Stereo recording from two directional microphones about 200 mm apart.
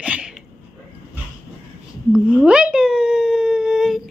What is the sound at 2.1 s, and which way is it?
Humming, 5° right (ahead or behind).